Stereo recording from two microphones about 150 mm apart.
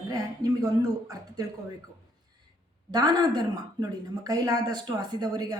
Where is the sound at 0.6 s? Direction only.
25° right (ahead or behind).